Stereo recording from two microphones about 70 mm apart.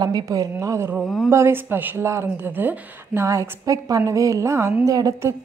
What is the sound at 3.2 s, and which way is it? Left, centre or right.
A woman's voice, right.